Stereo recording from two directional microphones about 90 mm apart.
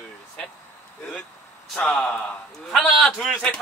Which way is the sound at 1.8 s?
5° left (ahead or behind).